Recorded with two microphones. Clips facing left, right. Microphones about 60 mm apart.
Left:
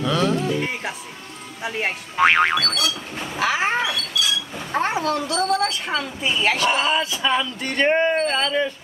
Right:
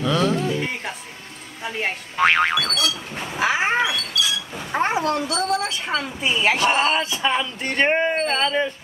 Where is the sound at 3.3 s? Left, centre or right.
Centre.